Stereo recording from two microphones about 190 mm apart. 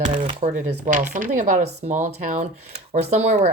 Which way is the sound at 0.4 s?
45° right (ahead or behind).